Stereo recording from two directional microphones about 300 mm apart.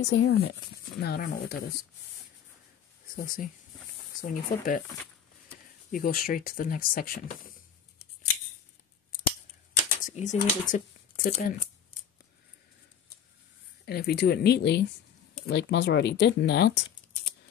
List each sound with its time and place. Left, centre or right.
0.0 s speech: left
3.2 s speech: left
5.9 s speech: left
10.0 s speech: left
10.7 s a sound: left
13.8 s speech: left